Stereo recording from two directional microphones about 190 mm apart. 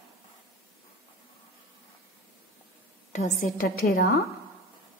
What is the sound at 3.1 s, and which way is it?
A woman's voice, 40° left (ahead or behind).